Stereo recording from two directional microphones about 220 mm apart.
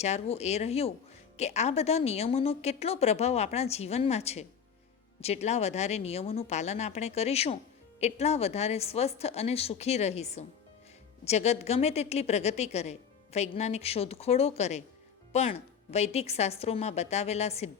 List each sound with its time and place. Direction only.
0.0 s a woman's voice: 30° left (ahead or behind)